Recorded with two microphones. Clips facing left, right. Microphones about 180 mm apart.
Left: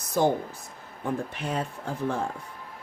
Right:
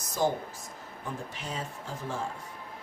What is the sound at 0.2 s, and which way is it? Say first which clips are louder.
Speech: left 5 dB; 60° left (ahead or behind).